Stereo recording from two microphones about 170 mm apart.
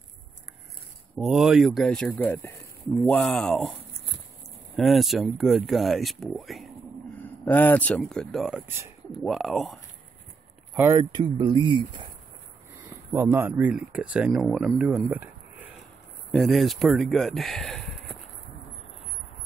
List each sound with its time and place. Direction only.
1.1 s speech: 5° right (ahead or behind)
4.7 s speech: centre (ahead or behind)
10.7 s a sound: 15° right (ahead or behind)
11.0 s speech: 25° right (ahead or behind)
12.7 s speech: 15° right (ahead or behind)
16.3 s speech: centre (ahead or behind)